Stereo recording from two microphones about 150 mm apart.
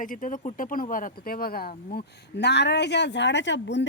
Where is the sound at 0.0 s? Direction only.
60° left (ahead or behind); by 2.6 s 90° left.